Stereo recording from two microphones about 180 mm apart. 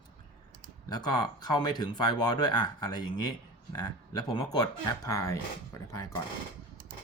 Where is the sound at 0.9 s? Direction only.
25° left (ahead or behind).